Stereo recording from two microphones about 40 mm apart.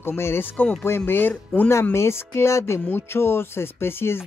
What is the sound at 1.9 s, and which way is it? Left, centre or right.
Speech, left.